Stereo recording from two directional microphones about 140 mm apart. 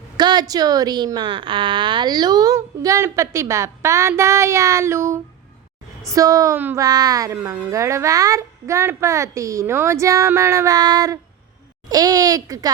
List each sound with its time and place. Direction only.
0.2 s a woman's voice: 30° right (ahead or behind)
7.3 s a woman's voice: 15° right (ahead or behind)